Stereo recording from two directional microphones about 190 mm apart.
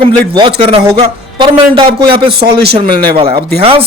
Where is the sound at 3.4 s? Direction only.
60° right (ahead or behind).